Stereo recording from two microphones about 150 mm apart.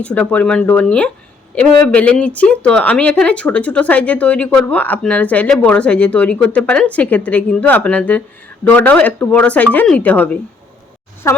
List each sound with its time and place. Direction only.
0.0 s speech: 10° left (ahead or behind)